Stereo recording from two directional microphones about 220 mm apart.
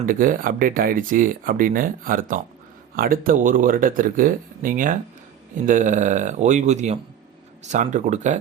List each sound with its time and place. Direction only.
0.0 s speech: 40° right (ahead or behind)